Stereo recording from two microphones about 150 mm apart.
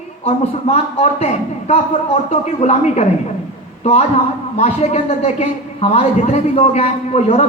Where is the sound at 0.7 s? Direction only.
40° left (ahead or behind).